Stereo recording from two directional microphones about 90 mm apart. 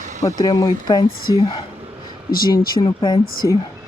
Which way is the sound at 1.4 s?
75° left (ahead or behind).